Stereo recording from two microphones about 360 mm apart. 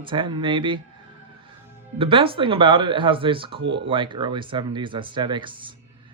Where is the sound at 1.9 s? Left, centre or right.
Centre.